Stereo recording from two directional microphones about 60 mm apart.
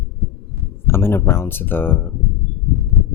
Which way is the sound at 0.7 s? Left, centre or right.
Left.